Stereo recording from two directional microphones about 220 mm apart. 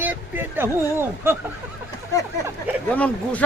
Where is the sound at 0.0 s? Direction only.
10° right (ahead or behind).